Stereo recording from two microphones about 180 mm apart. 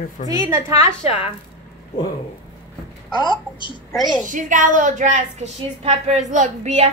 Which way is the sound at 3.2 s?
25° left (ahead or behind).